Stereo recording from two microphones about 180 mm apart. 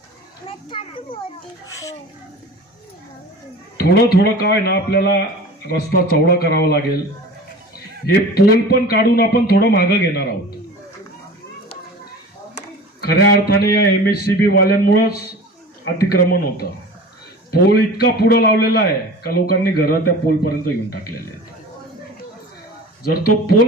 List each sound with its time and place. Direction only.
0.4 s a child's voice: 30° left (ahead or behind)
1.7 s a child's voice: 20° left (ahead or behind)
3.8 s a man's voice: 65° left (ahead or behind)
8.0 s a man's voice: 60° left (ahead or behind)
13.0 s a man's voice: 60° left (ahead or behind)